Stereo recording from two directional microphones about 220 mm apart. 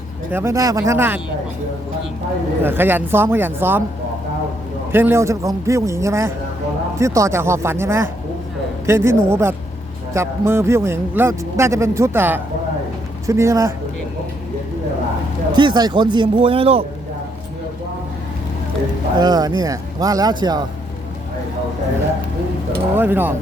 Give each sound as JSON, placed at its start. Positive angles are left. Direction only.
{"t": 0.3, "sound": "a man's voice", "side_deg": -10}
{"t": 2.6, "sound": "a man's voice", "side_deg": -10}
{"t": 4.9, "sound": "a man's voice", "side_deg": -10}
{"t": 15.5, "sound": "speech", "side_deg": -20}
{"t": 19.1, "sound": "a man's voice", "side_deg": -20}
{"t": 23.0, "sound": "a man's voice", "side_deg": -10}